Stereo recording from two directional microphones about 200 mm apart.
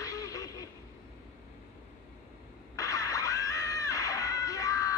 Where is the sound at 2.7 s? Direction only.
15° left (ahead or behind).